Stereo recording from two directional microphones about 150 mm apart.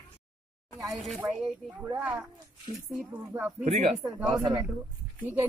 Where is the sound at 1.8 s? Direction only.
15° right (ahead or behind).